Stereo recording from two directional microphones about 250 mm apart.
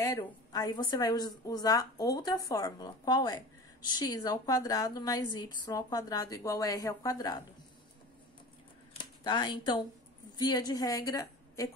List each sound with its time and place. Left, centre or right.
0.0 s a woman's voice: centre
8.9 s a sound: centre
10.3 s a woman's voice: centre